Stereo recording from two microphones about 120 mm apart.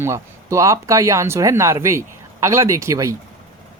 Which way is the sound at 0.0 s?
25° right (ahead or behind).